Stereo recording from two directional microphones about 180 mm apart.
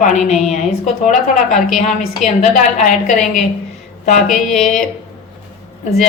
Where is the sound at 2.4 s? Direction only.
40° left (ahead or behind).